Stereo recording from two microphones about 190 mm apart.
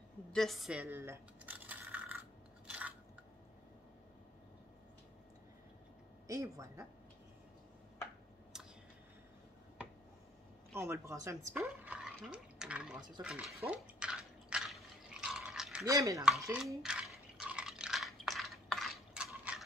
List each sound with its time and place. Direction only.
0.3 s a sound: centre (ahead or behind)
6.2 s speech: 15° right (ahead or behind)
8.5 s a sound: centre (ahead or behind)
10.7 s speech: 15° right (ahead or behind)
13.7 s drip: 5° right (ahead or behind)
15.8 s speech: 15° right (ahead or behind)
16.5 s drip: 5° right (ahead or behind)